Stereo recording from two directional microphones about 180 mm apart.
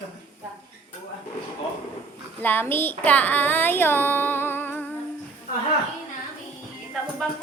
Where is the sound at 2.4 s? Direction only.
10° left (ahead or behind).